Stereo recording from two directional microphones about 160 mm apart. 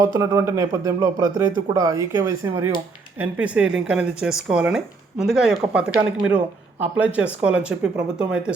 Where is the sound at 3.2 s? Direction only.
5° right (ahead or behind).